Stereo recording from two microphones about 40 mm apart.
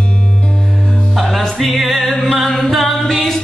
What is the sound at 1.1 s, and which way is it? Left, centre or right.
Music, centre.